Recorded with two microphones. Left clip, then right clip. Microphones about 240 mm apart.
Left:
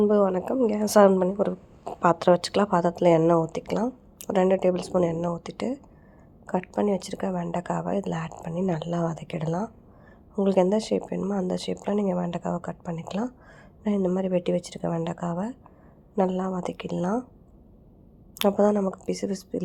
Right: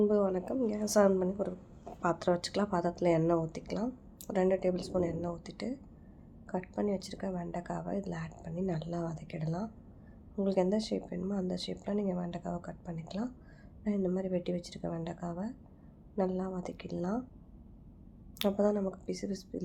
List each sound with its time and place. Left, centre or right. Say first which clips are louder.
0.0 s a woman's voice: left 8 dB; left
18.3 s a woman's voice: left 9 dB; left